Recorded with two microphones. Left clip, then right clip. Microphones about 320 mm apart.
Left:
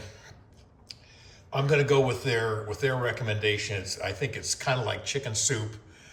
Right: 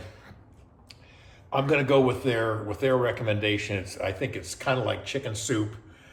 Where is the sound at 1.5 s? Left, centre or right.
Centre.